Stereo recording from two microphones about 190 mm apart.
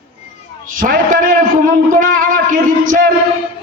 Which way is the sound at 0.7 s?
45° right (ahead or behind).